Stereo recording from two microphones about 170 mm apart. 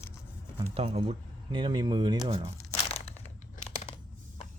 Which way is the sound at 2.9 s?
40° left (ahead or behind).